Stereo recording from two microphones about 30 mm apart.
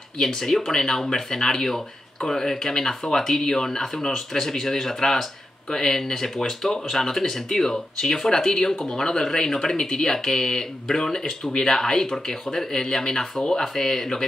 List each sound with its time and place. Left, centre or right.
0.2 s speech: centre